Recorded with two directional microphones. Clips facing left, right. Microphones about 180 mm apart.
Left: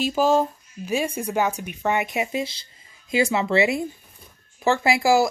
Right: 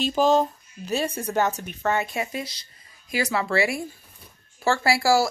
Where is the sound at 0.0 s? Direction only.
10° left (ahead or behind).